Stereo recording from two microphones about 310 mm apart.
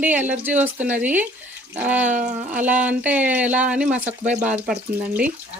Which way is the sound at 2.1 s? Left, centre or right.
Right.